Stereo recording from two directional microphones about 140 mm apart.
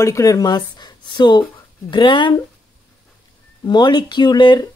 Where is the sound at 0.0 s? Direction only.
25° left (ahead or behind).